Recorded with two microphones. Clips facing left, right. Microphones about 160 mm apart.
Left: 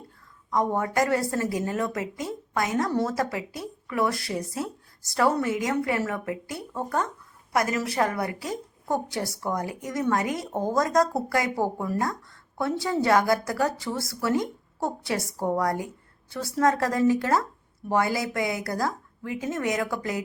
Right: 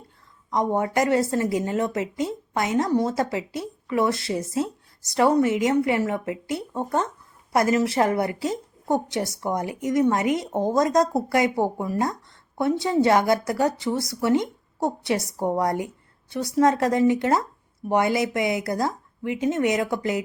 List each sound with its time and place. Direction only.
0.5 s a woman's voice: 20° right (ahead or behind)